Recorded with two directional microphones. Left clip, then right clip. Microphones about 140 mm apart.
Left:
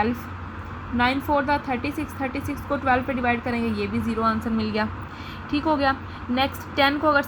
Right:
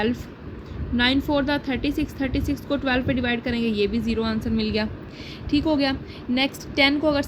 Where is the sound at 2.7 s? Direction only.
50° right (ahead or behind).